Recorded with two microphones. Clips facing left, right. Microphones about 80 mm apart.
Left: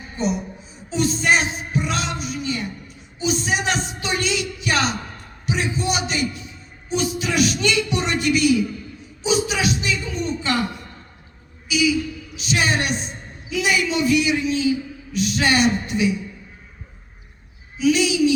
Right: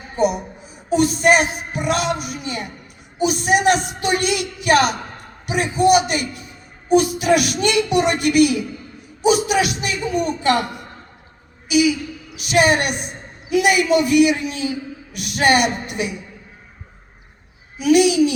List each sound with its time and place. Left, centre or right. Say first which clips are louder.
0.2 s a woman's voice: right 5 dB; right
0.9 s music: right 5 dB; right
5.5 s a man's voice: right 8 dB; right
11.7 s a man's voice: right 3 dB; right
17.7 s a man's voice: right 4 dB; right